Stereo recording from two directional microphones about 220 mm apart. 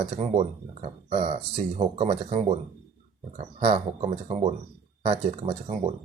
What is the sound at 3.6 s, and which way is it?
Speech, 30° right (ahead or behind).